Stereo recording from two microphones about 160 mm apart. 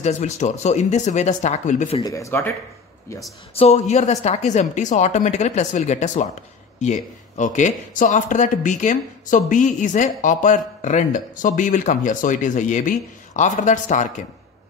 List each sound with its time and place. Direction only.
0.0 s speech: 45° left (ahead or behind)
2.0 s speech: 20° left (ahead or behind)
3.5 s speech: 45° left (ahead or behind)